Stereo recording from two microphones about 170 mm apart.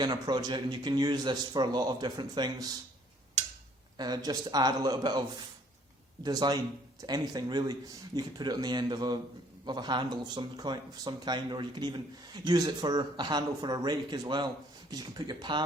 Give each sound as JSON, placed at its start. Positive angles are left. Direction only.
{"t": 0.0, "sound": "speech", "side_deg": -25}
{"t": 3.9, "sound": "speech", "side_deg": -25}
{"t": 6.2, "sound": "speech", "side_deg": -25}